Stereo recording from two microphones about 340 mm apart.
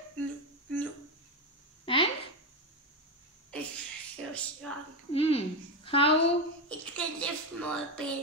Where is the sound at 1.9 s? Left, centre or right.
Centre.